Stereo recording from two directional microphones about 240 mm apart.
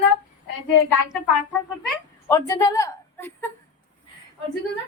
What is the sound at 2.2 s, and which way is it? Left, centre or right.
A woman's voice, centre.